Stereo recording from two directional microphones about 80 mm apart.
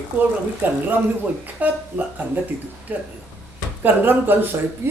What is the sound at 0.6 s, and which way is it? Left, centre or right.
A man's voice, right.